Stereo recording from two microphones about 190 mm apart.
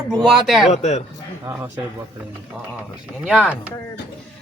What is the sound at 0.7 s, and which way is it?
Speech, 35° left (ahead or behind).